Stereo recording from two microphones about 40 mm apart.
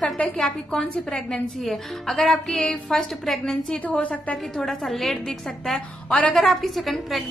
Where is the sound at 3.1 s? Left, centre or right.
Centre.